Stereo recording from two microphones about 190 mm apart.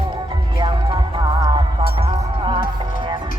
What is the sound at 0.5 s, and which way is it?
Music, 25° right (ahead or behind).